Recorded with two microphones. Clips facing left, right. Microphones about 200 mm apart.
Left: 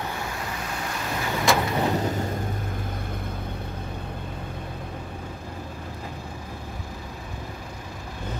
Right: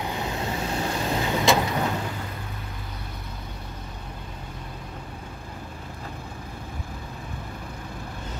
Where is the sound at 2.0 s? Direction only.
40° left (ahead or behind).